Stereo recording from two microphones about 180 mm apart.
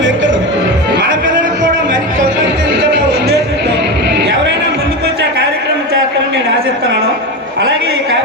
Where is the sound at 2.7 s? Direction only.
65° right (ahead or behind).